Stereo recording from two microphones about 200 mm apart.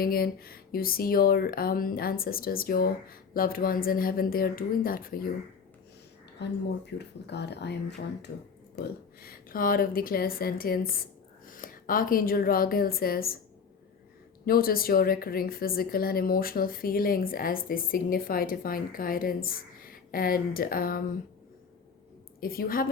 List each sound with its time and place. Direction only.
0.0 s a woman's voice: 50° left (ahead or behind)
6.4 s a woman's voice: 60° left (ahead or behind)
14.4 s a woman's voice: 50° left (ahead or behind)
22.4 s a woman's voice: 45° left (ahead or behind)